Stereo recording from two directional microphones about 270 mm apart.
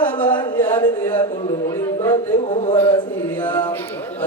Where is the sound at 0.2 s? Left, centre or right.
Centre.